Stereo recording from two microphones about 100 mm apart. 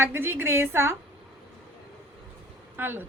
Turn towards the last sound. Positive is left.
turn(degrees=-20)  # may be behind; listen again after turning